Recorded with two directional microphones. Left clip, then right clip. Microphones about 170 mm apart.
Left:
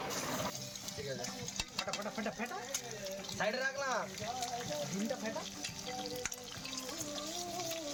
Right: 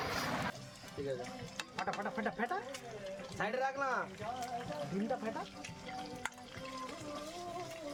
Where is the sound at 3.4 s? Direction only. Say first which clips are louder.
Left 2 dB; 50° right (ahead or behind).